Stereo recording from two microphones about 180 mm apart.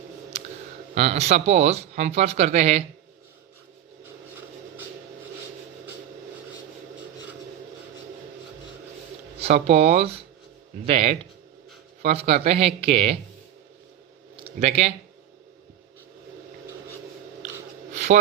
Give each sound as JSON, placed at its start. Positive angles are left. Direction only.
{"t": 0.9, "sound": "speech", "side_deg": -35}
{"t": 9.4, "sound": "speech", "side_deg": -35}
{"t": 14.3, "sound": "speech", "side_deg": -35}
{"t": 17.9, "sound": "a sound", "side_deg": -40}